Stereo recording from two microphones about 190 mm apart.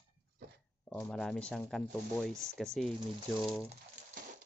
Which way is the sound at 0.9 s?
5° left (ahead or behind).